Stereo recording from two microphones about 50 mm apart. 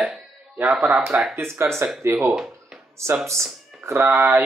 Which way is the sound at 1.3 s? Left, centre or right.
Right.